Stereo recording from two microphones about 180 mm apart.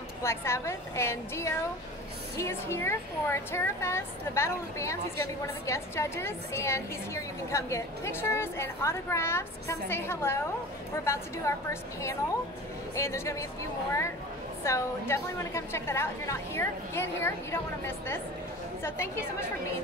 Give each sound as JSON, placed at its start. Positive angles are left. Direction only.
{"t": 0.2, "sound": "a woman's voice", "side_deg": 15}
{"t": 14.6, "sound": "a woman's voice", "side_deg": 15}